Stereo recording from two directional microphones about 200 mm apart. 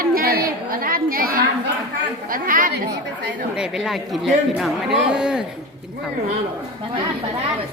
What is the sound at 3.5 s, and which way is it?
A man's voice, 5° right (ahead or behind).